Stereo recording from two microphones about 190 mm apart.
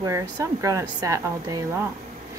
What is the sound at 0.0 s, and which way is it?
Speech, 15° right (ahead or behind).